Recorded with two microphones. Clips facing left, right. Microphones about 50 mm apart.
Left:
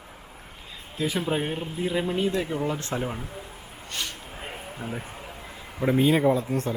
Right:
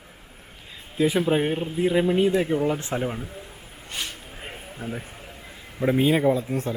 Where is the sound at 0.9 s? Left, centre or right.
Right.